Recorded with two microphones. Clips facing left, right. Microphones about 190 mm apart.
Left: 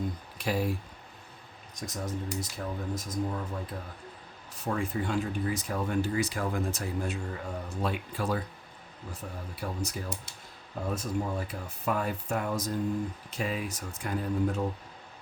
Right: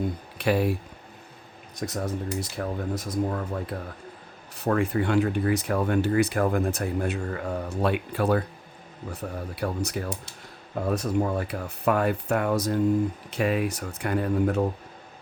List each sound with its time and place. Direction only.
0.3 s speech: 65° right (ahead or behind)
1.8 s speech: 65° right (ahead or behind)
9.6 s speech: 70° right (ahead or behind)